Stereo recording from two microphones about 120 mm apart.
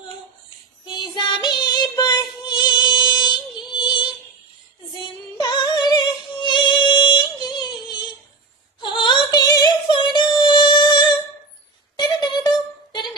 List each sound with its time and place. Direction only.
0.9 s child singing: 40° left (ahead or behind)
5.4 s music: 35° left (ahead or behind)
8.8 s female singing: 40° left (ahead or behind)
11.9 s a sound: 35° left (ahead or behind)